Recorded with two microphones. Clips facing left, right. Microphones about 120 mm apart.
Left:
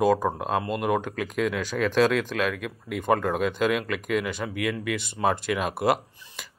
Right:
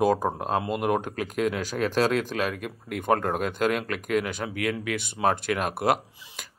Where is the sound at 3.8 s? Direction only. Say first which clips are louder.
Even; centre (ahead or behind).